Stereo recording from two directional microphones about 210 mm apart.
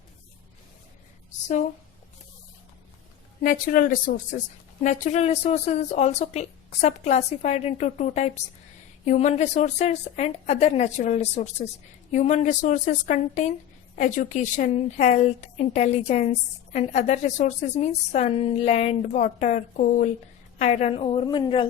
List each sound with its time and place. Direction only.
3.4 s a woman's voice: 40° left (ahead or behind); by 21.7 s 20° left (ahead or behind)